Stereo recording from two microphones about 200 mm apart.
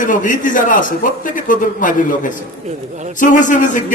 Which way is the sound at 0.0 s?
40° left (ahead or behind).